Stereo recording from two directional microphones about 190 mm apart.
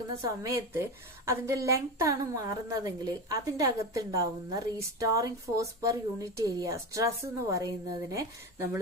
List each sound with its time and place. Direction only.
0.2 s a woman's voice: 15° right (ahead or behind)